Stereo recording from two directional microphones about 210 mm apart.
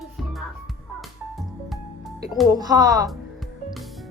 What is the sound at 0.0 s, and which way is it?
Music, centre (ahead or behind).